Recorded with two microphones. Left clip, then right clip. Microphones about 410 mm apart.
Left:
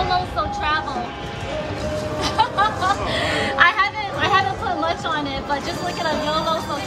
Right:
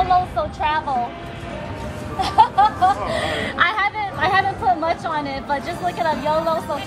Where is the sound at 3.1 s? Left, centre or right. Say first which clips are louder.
Left 1 dB; centre.